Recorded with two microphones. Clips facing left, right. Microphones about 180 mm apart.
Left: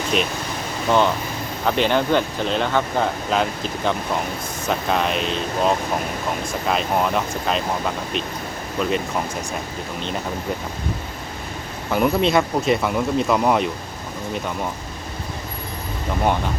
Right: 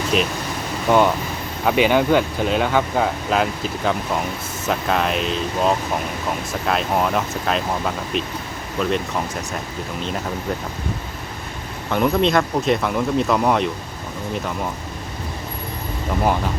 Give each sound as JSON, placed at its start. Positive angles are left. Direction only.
{"t": 0.1, "sound": "speech", "side_deg": 0}
{"t": 8.8, "sound": "speech", "side_deg": 0}
{"t": 11.9, "sound": "speech", "side_deg": 5}